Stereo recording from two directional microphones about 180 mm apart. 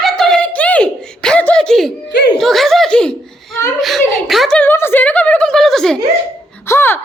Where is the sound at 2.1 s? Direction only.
70° left (ahead or behind).